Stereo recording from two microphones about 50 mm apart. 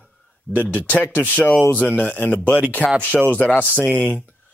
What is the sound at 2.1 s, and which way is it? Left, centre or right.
Speech, left.